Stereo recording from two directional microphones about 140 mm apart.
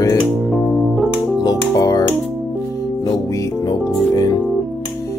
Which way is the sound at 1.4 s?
25° left (ahead or behind).